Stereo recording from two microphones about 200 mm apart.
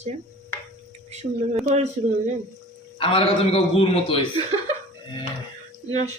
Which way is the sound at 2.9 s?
25° left (ahead or behind).